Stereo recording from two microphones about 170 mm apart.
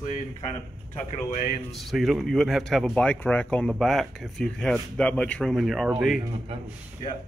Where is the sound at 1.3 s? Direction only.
50° left (ahead or behind).